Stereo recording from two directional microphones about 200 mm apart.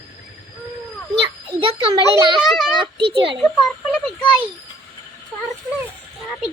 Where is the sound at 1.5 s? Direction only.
25° right (ahead or behind).